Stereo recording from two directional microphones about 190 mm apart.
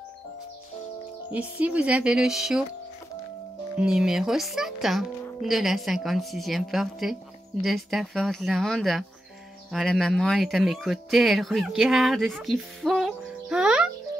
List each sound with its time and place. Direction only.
1.3 s speech: 5° right (ahead or behind)
3.7 s speech: 5° right (ahead or behind)